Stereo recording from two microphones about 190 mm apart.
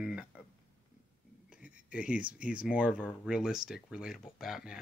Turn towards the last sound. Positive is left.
turn(degrees=0)  # may be behind; listen again after turning